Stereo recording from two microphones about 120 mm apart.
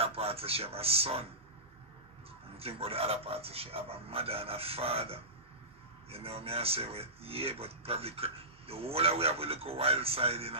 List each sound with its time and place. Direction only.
0.0 s speech: 55° right (ahead or behind)
2.5 s a man's voice: 55° right (ahead or behind)